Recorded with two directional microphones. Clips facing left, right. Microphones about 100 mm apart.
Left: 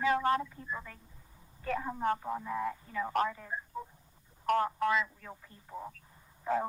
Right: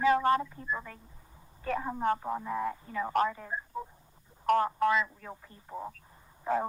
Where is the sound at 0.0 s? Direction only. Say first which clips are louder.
Right 4 dB; 35° right (ahead or behind).